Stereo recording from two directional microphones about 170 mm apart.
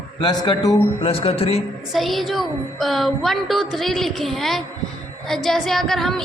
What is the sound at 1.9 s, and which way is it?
Speech, centre (ahead or behind).